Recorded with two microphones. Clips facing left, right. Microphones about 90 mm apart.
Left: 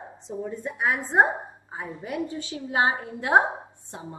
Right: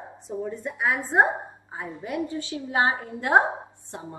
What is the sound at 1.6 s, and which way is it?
A woman's voice, 5° left (ahead or behind).